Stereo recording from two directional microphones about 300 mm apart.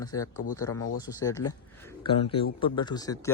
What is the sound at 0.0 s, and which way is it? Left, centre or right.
Speech, centre.